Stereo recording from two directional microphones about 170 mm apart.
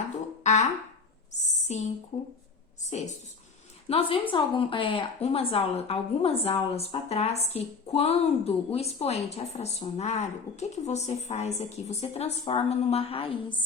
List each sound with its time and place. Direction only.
0.4 s speech: 45° left (ahead or behind)
1.3 s a sound: 45° left (ahead or behind)
3.8 s a woman's voice: 35° left (ahead or behind)